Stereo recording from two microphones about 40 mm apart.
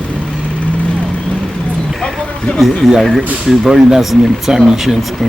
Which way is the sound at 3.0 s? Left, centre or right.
Centre.